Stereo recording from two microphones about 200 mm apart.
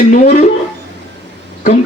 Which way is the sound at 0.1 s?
35° left (ahead or behind).